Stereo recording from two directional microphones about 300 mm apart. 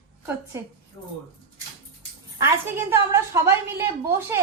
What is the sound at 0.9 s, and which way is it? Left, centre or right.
Speech, centre.